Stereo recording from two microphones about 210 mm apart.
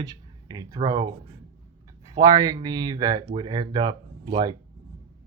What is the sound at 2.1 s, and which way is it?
Speech, 15° right (ahead or behind).